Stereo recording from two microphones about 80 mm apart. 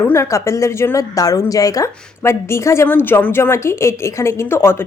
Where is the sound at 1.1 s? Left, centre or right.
Left.